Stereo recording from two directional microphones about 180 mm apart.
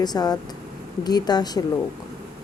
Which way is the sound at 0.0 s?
20° left (ahead or behind).